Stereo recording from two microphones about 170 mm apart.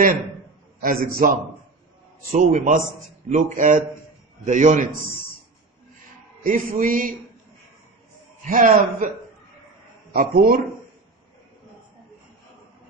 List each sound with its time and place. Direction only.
0.8 s a man's voice: 55° right (ahead or behind)
6.4 s a man's voice: 50° right (ahead or behind)
8.4 s a man's voice: 50° right (ahead or behind)
10.1 s a man's voice: 65° right (ahead or behind)